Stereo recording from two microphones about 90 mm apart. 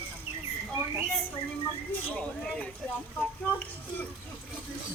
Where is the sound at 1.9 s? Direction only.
10° left (ahead or behind).